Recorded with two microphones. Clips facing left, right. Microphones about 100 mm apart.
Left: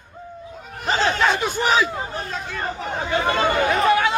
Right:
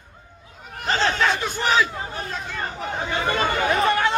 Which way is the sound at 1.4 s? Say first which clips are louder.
Left 2 dB; 15° left (ahead or behind).